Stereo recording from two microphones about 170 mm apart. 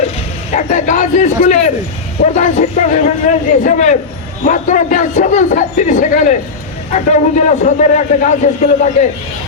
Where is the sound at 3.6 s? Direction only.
45° left (ahead or behind).